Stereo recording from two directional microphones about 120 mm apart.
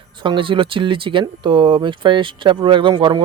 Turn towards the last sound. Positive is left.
turn(degrees=-40)  # may be behind; listen again after turning